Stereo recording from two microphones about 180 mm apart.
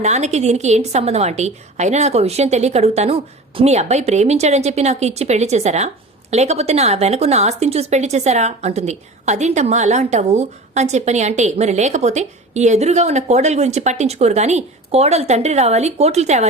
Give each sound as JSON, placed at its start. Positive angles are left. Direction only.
{"t": 0.0, "sound": "speech", "side_deg": -40}